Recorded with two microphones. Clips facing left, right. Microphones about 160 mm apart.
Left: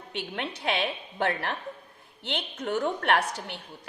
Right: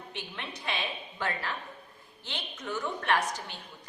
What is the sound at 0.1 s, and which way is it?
A woman's voice, 75° left (ahead or behind).